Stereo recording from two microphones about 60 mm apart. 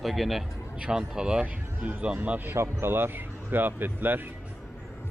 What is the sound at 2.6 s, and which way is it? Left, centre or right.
Speech, right.